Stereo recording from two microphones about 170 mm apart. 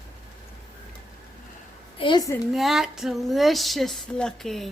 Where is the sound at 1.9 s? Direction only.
30° left (ahead or behind).